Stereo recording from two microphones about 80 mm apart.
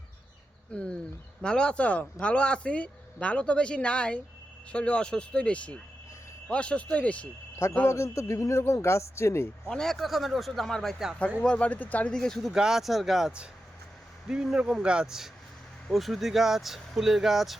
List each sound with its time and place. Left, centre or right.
0.7 s speech: centre
7.9 s speech: left
9.6 s speech: centre
11.4 s speech: centre
12.1 s speech: centre